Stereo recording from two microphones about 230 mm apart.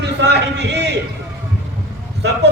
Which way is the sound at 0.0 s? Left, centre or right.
Right.